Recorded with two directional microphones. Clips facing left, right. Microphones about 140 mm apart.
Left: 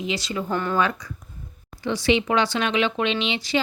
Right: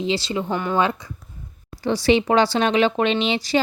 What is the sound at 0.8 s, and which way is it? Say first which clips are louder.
Speech: right 2 dB; 25° right (ahead or behind).